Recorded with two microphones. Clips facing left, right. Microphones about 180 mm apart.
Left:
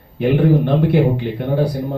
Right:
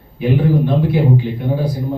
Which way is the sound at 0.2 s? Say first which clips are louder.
Left 1 dB; 70° left (ahead or behind).